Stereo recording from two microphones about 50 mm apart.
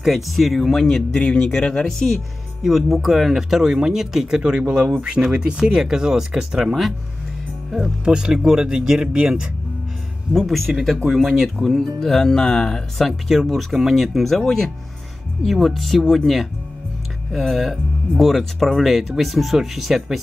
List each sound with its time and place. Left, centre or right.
0.0 s speech: centre
2.6 s speech: centre
4.4 s speech: right; by 6.9 s centre
8.0 s speech: centre
10.3 s speech: centre
17.3 s speech: centre